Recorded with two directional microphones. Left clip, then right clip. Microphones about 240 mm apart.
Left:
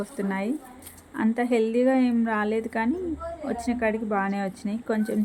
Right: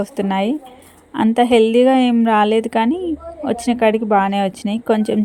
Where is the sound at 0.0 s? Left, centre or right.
Right.